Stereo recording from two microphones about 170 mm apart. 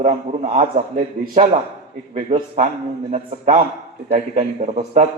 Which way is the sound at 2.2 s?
35° right (ahead or behind).